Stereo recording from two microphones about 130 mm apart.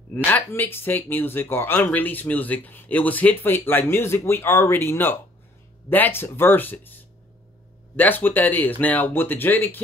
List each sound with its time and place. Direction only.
0.1 s speech: 15° left (ahead or behind)
7.9 s speech: 15° left (ahead or behind)